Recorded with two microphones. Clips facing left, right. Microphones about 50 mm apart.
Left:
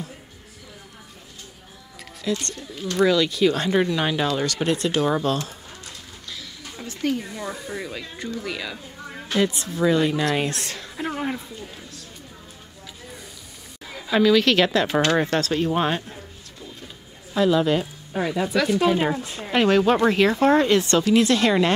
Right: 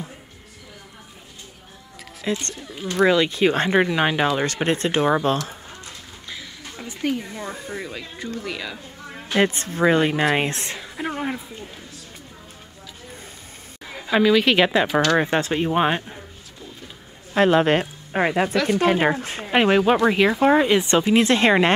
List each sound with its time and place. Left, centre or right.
2.3 s speech: right
2.7 s speech: centre
3.1 s speech: right
6.3 s a sound: right
7.2 s speech: right
7.7 s speech: centre
9.4 s speech: right
10.8 s speech: centre
13.8 s a woman's voice: centre
17.3 s a woman's voice: right
19.5 s speech: right